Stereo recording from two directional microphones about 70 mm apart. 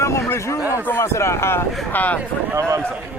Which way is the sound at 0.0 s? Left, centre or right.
Left.